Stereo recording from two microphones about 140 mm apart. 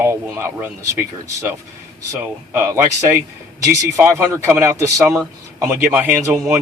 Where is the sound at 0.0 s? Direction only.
20° right (ahead or behind).